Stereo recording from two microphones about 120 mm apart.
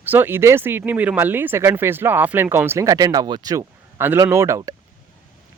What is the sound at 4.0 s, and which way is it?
Speech, 20° right (ahead or behind).